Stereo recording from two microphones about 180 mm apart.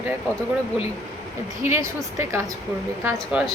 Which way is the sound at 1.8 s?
15° right (ahead or behind).